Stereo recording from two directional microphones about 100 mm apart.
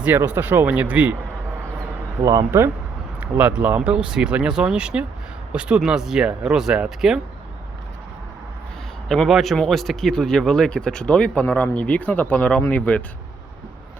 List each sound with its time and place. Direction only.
0.0 s speech: 15° right (ahead or behind)
2.2 s speech: 25° right (ahead or behind)
3.2 s speech: 15° right (ahead or behind)
9.0 s speech: centre (ahead or behind)